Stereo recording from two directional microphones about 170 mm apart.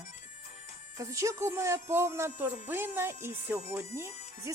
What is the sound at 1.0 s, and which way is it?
Speech, 20° right (ahead or behind).